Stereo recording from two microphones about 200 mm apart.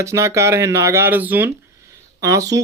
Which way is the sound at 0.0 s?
15° right (ahead or behind).